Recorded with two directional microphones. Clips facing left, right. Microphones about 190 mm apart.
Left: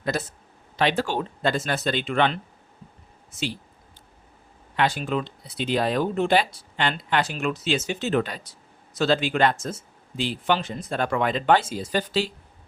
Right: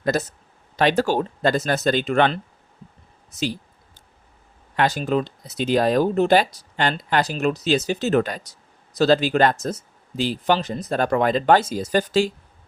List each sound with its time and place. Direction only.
0.0 s speech: 40° right (ahead or behind)
4.8 s speech: 40° right (ahead or behind)